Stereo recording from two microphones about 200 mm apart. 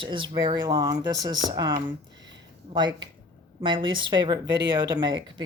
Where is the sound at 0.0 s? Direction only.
25° right (ahead or behind).